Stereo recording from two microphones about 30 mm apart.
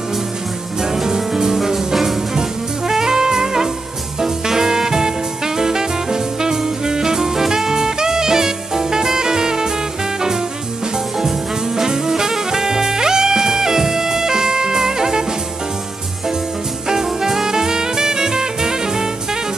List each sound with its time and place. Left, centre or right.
1.0 s music: centre
5.6 s jazz: centre
11.1 s music: centre
16.9 s music: centre